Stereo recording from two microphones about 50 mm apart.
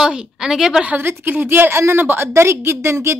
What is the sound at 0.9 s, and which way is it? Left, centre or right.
A woman's voice, right.